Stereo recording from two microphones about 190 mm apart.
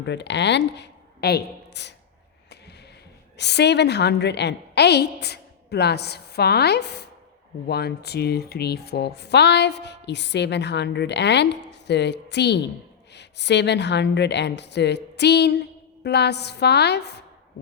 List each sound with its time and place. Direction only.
0.0 s a woman's voice: 65° left (ahead or behind)
3.3 s speech: 60° left (ahead or behind)